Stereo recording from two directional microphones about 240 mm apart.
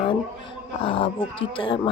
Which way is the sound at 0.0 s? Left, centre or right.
Left.